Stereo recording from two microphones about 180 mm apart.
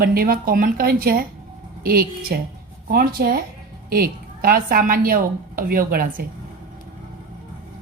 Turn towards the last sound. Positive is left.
turn(degrees=-55)  # may be behind; listen again after turning